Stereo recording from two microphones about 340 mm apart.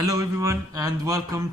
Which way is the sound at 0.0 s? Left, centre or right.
Centre.